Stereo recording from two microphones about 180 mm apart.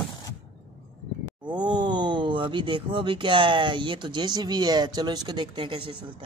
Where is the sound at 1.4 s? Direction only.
25° right (ahead or behind).